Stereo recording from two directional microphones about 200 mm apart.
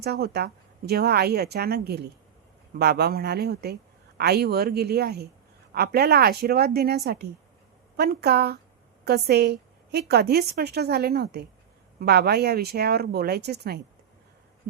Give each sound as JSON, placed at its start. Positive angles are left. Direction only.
{"t": 0.0, "sound": "a woman's voice", "side_deg": -55}